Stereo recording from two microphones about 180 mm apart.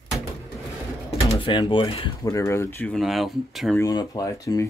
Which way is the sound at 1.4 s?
25° left (ahead or behind).